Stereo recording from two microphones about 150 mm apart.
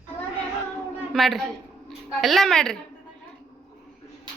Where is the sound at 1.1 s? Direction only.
Centre (ahead or behind).